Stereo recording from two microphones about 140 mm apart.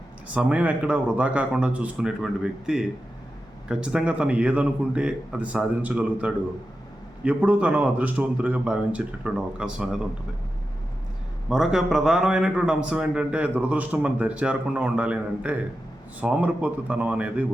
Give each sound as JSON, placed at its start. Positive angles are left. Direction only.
{"t": 0.3, "sound": "speech", "side_deg": -10}
{"t": 11.4, "sound": "a man's voice", "side_deg": -5}